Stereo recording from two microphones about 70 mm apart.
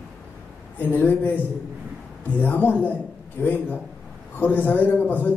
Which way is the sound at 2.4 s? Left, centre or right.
Left.